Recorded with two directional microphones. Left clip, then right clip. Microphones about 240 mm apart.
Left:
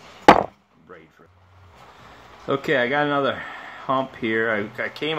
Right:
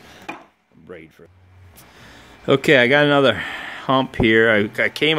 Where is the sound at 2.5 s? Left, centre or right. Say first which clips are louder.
Right 7 dB; right.